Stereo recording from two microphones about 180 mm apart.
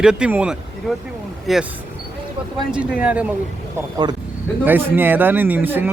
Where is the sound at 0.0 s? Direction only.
5° right (ahead or behind).